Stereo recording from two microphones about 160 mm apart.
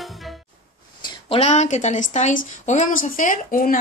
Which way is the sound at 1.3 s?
45° left (ahead or behind).